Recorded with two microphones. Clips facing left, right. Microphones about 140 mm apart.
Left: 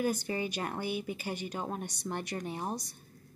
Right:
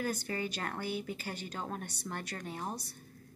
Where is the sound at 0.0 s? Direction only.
15° left (ahead or behind).